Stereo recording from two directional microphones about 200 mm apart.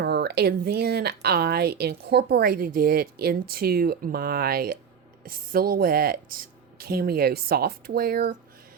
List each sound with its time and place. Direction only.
0.0 s speech: 55° right (ahead or behind)